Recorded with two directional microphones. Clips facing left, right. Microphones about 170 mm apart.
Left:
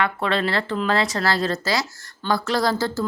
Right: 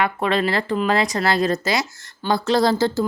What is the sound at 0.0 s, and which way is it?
A woman's voice, 15° right (ahead or behind).